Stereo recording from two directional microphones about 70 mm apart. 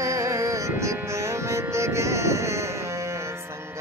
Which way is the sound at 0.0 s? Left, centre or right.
Right.